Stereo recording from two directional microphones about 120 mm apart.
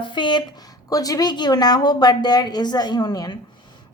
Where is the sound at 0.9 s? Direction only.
30° left (ahead or behind).